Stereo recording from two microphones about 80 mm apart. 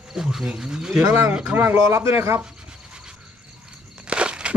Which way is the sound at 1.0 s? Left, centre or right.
Right.